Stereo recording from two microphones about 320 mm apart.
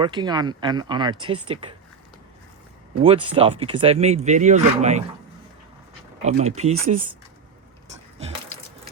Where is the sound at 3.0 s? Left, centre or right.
Centre.